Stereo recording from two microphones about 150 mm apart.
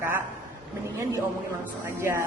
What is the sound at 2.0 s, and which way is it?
Speech, 15° right (ahead or behind).